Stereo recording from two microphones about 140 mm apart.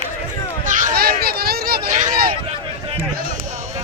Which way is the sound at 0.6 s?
65° right (ahead or behind).